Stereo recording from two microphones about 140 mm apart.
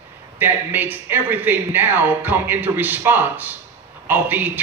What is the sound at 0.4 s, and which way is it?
A man's voice, 15° right (ahead or behind).